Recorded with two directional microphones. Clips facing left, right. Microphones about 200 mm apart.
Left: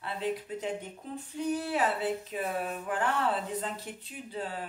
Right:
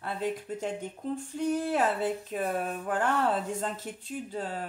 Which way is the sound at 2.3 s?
45° right (ahead or behind).